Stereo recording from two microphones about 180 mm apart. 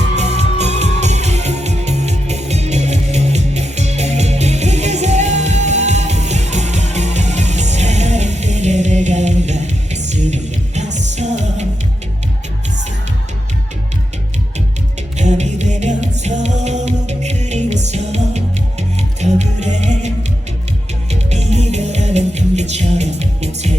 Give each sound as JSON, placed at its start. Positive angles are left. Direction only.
{"t": 0.2, "sound": "music", "side_deg": -40}
{"t": 15.2, "sound": "music", "side_deg": -40}
{"t": 21.1, "sound": "music", "side_deg": -35}